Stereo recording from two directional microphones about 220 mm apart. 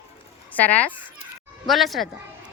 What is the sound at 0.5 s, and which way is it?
Speech, 5° left (ahead or behind).